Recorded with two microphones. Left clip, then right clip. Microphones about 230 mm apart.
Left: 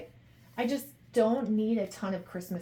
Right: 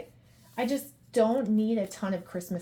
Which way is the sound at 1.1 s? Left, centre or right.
Right.